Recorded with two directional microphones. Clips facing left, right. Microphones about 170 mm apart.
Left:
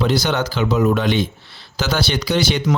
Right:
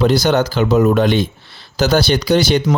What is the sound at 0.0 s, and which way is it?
Speech, 40° right (ahead or behind).